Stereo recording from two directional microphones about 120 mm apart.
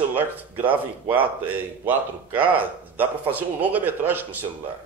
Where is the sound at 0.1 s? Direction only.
15° right (ahead or behind).